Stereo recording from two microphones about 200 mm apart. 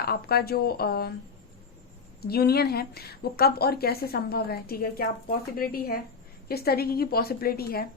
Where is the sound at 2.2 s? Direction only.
50° left (ahead or behind).